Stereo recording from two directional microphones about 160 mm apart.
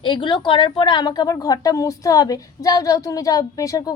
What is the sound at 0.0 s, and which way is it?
A woman's voice, 30° left (ahead or behind).